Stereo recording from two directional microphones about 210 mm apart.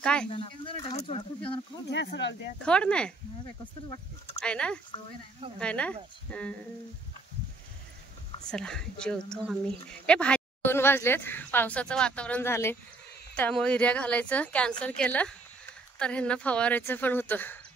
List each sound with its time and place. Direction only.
0.0 s a woman's voice: 5° left (ahead or behind)
0.3 s speech: 25° left (ahead or behind)
1.9 s speech: 55° left (ahead or behind)
2.6 s a woman's voice: 5° left (ahead or behind)
4.4 s a woman's voice: 5° left (ahead or behind)
8.5 s a woman's voice: 5° left (ahead or behind)